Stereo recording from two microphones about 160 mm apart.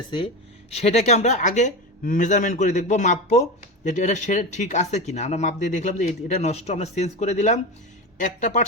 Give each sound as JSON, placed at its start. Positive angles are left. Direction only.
{"t": 0.7, "sound": "speech", "side_deg": 40}